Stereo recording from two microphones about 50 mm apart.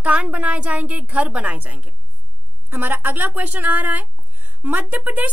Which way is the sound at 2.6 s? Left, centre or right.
Right.